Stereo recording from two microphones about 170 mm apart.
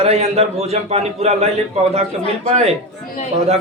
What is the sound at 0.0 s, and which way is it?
A man's voice, 40° right (ahead or behind).